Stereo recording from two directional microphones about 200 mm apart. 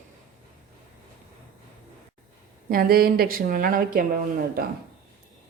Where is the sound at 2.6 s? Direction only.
50° right (ahead or behind).